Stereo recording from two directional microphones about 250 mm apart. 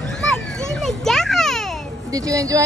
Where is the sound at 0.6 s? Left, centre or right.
Centre.